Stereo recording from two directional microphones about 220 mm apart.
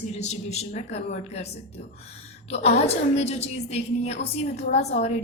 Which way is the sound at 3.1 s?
30° left (ahead or behind).